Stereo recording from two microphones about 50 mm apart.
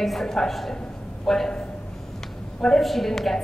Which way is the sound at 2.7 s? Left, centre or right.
Centre.